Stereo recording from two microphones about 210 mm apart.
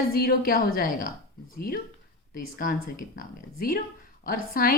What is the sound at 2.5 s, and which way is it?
A woman's voice, 40° left (ahead or behind).